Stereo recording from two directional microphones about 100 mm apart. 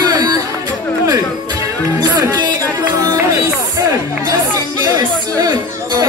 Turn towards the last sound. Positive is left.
turn(degrees=-35)  # may be behind; listen again after turning